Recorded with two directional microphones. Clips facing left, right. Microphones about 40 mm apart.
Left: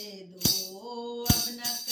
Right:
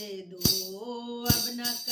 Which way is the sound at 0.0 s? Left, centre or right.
Right.